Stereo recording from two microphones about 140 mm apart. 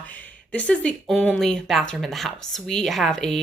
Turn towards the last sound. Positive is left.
turn(degrees=5)  # may be behind; listen again after turning